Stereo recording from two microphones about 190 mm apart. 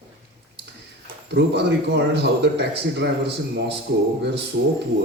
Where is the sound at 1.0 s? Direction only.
60° right (ahead or behind).